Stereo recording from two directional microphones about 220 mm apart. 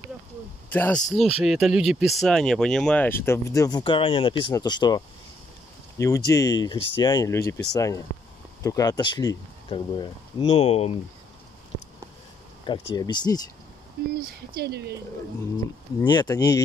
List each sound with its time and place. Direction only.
0.7 s speech: 10° left (ahead or behind); by 10.9 s 25° left (ahead or behind)
12.9 s speech: 20° left (ahead or behind)
14.1 s speech: 45° right (ahead or behind)
16.1 s speech: 20° left (ahead or behind)